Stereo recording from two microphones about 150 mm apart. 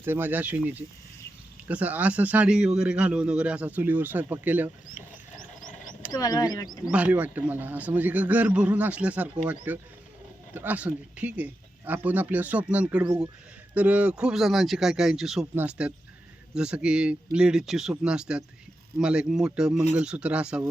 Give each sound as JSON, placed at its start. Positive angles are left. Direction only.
{"t": 0.0, "sound": "a man's voice", "side_deg": -15}
{"t": 6.1, "sound": "speech", "side_deg": 25}
{"t": 6.9, "sound": "a man's voice", "side_deg": -10}